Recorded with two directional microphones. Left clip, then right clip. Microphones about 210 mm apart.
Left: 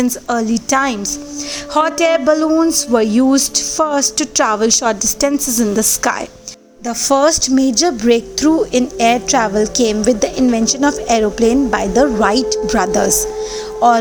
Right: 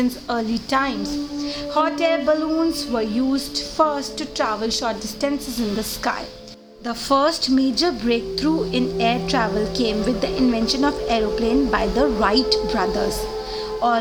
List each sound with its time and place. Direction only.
0.0 s a woman's voice: 30° left (ahead or behind)
6.8 s a woman's voice: 25° left (ahead or behind)